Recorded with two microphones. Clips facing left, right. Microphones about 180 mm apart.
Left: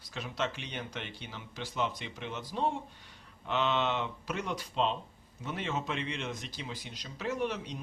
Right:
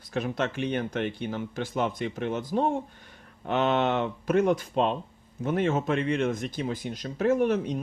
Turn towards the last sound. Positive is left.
turn(degrees=-50)  # may be behind; listen again after turning